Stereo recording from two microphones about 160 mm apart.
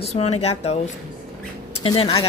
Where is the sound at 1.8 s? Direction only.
35° left (ahead or behind).